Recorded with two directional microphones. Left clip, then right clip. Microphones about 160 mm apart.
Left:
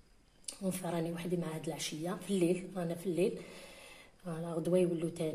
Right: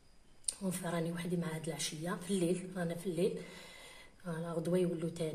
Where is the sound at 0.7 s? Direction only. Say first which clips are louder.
Left 2 dB; 15° left (ahead or behind).